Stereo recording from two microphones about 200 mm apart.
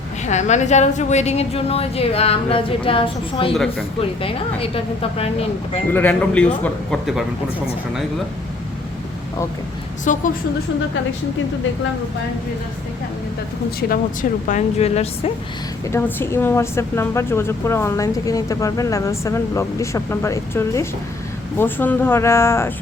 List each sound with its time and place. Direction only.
0.3 s a woman's voice: 35° left (ahead or behind)
5.9 s a woman's voice: 10° left (ahead or behind)
10.1 s a woman's voice: 40° left (ahead or behind)
13.7 s a woman's voice: 45° left (ahead or behind)
15.9 s a woman's voice: 10° left (ahead or behind)